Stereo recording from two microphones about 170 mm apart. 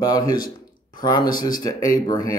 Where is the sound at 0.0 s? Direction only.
20° left (ahead or behind).